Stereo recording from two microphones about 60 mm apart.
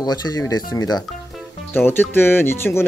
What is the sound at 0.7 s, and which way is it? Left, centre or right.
Speech, left.